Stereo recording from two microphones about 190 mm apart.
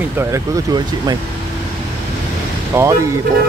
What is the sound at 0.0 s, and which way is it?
Speech, 10° right (ahead or behind).